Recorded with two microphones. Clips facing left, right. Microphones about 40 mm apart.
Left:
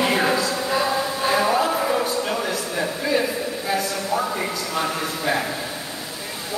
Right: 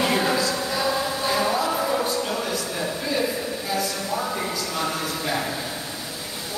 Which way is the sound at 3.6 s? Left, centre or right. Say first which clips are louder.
Left 3 dB; left.